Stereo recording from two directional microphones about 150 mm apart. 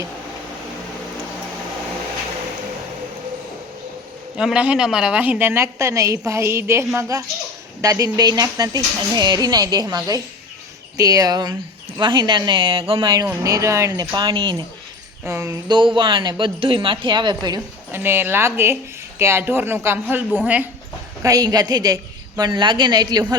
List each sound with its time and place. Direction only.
4.4 s a woman's voice: 5° right (ahead or behind); by 13.2 s 30° right (ahead or behind)
13.4 s speech: 20° right (ahead or behind)
15.2 s speech: 20° right (ahead or behind)
15.7 s a woman's voice: 35° right (ahead or behind)
17.9 s a woman's voice: 15° right (ahead or behind)
21.2 s speech: 25° right (ahead or behind)